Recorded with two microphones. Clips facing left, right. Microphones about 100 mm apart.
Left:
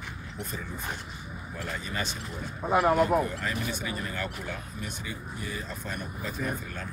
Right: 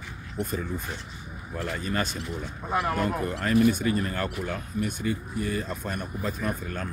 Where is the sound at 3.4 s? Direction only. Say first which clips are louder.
Right 10 dB; 50° right (ahead or behind).